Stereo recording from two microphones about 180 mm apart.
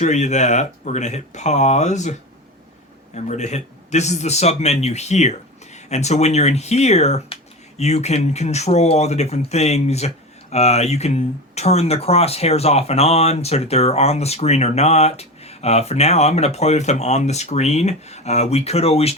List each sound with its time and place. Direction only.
0.0 s speech: 40° left (ahead or behind)
3.2 s speech: 40° left (ahead or behind)